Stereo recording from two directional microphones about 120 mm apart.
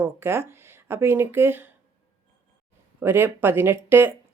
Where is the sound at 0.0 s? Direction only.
20° right (ahead or behind).